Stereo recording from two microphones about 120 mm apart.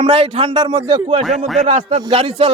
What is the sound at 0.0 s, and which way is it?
Speech, 50° right (ahead or behind).